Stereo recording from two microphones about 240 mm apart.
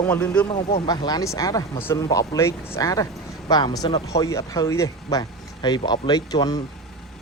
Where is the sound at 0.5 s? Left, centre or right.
Centre.